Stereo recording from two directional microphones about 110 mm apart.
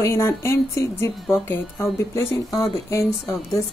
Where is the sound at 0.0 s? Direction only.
25° left (ahead or behind).